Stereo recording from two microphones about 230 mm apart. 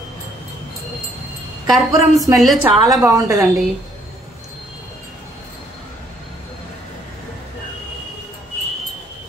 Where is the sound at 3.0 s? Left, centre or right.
Centre.